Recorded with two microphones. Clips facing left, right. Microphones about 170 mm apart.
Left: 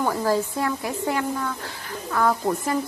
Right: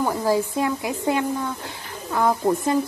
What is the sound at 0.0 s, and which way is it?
A woman's voice, 15° right (ahead or behind).